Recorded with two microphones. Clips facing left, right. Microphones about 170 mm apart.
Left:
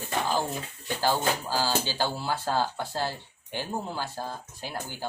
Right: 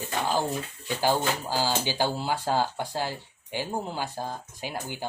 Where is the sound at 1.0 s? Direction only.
15° right (ahead or behind).